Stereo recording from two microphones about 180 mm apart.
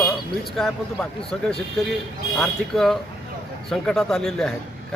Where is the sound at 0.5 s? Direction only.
Centre (ahead or behind).